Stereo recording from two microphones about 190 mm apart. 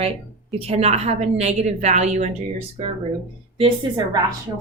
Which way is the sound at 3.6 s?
20° right (ahead or behind).